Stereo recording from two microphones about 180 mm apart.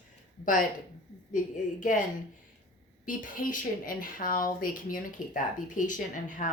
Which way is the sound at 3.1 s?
50° left (ahead or behind).